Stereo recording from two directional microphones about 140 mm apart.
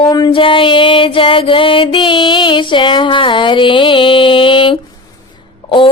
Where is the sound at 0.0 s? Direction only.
40° left (ahead or behind).